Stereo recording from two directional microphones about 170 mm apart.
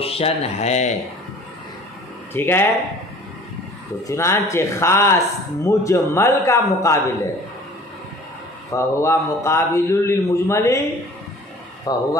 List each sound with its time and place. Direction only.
0.0 s speech: 35° left (ahead or behind)
2.3 s a man's voice: 15° left (ahead or behind)
4.1 s a man's voice: 15° left (ahead or behind)
8.6 s a man's voice: 15° left (ahead or behind)
11.9 s speech: 20° left (ahead or behind)